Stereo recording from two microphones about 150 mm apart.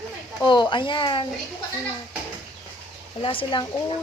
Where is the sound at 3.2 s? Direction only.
35° left (ahead or behind).